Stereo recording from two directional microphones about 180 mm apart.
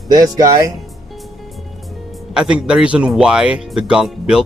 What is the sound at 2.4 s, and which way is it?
Speech, 5° right (ahead or behind).